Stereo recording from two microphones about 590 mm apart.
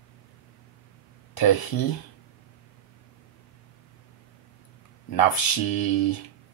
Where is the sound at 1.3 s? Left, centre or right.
Left.